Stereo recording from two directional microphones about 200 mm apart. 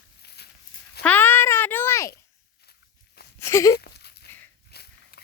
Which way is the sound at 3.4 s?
15° left (ahead or behind).